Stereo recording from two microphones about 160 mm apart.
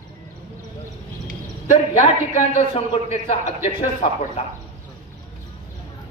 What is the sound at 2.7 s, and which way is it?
Speech, 40° left (ahead or behind).